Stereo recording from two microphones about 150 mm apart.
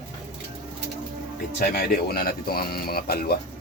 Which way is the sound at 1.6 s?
90° left.